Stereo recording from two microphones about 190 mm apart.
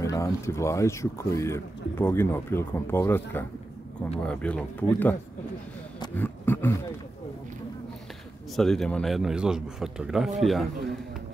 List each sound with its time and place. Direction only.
0.0 s speech: 15° left (ahead or behind)
6.1 s roaring cats: 10° left (ahead or behind)
8.5 s a man's voice: centre (ahead or behind)